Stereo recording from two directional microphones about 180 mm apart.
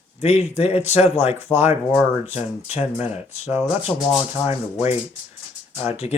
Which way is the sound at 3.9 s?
5° left (ahead or behind).